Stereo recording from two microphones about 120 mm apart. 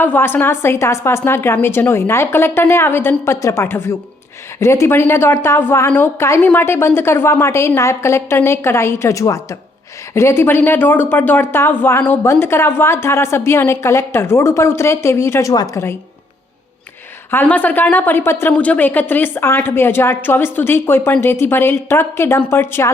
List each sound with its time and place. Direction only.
0.0 s speech: 15° left (ahead or behind)
17.3 s speech: 15° left (ahead or behind)